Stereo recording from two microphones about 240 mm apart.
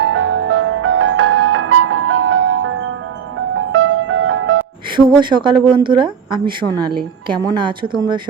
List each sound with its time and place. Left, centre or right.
0.0 s music: right
4.9 s a woman's voice: centre